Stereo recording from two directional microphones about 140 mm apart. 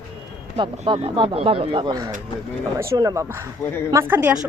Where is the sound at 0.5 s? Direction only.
40° right (ahead or behind).